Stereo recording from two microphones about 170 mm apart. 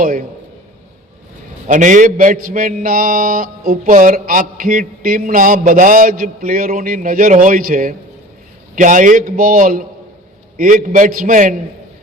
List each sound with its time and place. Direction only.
0.0 s a man's voice: 55° right (ahead or behind)
1.6 s a man's voice: 50° right (ahead or behind)